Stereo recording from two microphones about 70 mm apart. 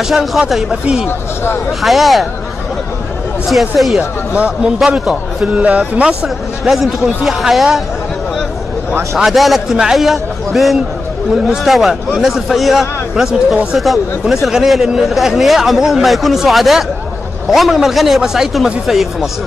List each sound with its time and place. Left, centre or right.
0.1 s speech: centre
1.0 s speech: left
1.7 s speech: centre
3.4 s speech: centre
4.3 s speech: centre
5.4 s speech: centre
6.2 s speech: centre
9.1 s speech: centre